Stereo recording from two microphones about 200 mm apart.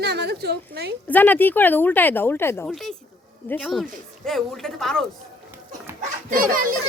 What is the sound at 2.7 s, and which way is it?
Speech, centre (ahead or behind).